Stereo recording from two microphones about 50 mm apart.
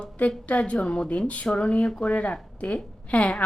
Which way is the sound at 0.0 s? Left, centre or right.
Left.